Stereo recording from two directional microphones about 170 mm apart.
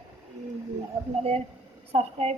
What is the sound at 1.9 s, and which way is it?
Speech, 35° right (ahead or behind).